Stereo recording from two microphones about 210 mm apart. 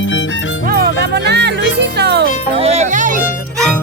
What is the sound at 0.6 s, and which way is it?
Music, 45° right (ahead or behind).